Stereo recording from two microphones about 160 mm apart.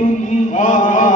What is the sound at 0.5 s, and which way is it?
Chant, 50° left (ahead or behind).